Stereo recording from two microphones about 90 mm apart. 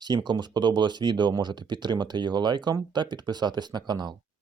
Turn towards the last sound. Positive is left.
turn(degrees=-55)  # may be behind; listen again after turning